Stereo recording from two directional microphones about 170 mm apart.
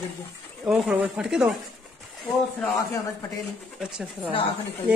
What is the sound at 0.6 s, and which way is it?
Speech, 5° right (ahead or behind).